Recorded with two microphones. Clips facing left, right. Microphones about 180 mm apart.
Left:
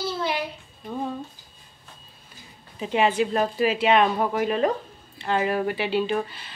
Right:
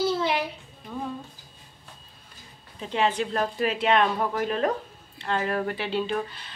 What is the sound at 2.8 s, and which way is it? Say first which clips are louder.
Speech: left 4 dB; 10° left (ahead or behind).